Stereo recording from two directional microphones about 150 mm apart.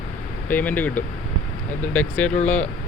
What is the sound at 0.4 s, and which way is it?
Speech, 10° left (ahead or behind).